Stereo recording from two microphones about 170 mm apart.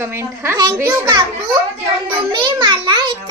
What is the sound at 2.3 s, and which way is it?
Speech, 30° right (ahead or behind).